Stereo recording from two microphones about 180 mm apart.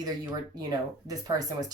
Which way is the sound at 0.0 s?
20° right (ahead or behind).